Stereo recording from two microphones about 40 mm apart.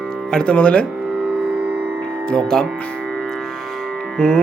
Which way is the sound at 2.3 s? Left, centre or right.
Centre.